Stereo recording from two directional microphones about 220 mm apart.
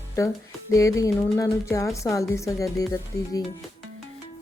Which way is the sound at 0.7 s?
15° left (ahead or behind).